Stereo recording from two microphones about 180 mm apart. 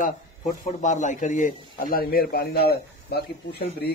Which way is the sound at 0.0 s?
40° left (ahead or behind).